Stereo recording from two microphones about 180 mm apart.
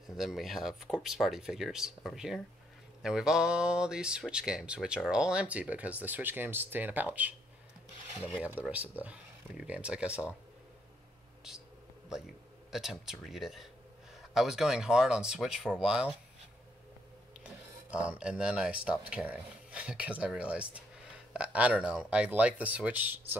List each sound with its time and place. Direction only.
0.0 s speech: centre (ahead or behind)
8.4 s speech: 10° right (ahead or behind)
12.7 s speech: centre (ahead or behind)
17.4 s music: 5° right (ahead or behind)
18.9 s speech: 5° right (ahead or behind)